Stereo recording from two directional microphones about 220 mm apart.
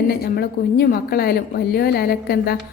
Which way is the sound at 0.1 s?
45° left (ahead or behind).